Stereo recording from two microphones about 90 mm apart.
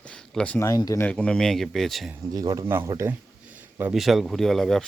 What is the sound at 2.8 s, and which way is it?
Speech, 30° right (ahead or behind).